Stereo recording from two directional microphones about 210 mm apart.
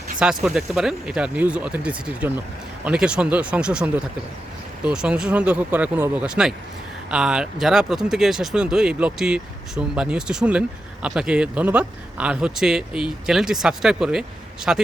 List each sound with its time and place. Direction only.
0.2 s speech: 5° right (ahead or behind)